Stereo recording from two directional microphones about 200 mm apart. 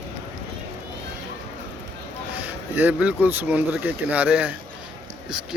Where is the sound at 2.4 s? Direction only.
10° right (ahead or behind).